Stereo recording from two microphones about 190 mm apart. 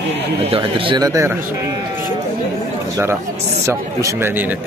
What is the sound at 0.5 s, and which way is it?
Speech, 30° right (ahead or behind).